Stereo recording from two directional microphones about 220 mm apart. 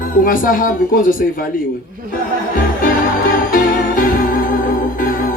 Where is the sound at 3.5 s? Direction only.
40° left (ahead or behind).